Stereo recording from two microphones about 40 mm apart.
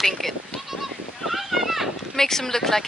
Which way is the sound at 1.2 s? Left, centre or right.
Centre.